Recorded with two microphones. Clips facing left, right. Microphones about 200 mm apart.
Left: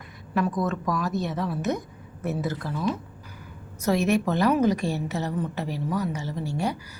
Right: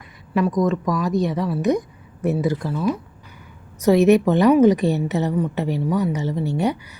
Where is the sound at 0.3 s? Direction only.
10° right (ahead or behind).